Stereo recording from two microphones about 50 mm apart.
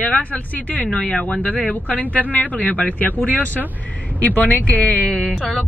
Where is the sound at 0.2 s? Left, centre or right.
Left.